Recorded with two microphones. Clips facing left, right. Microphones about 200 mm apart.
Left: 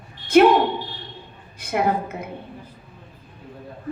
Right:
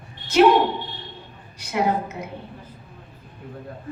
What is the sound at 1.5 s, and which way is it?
Speech, 55° left (ahead or behind).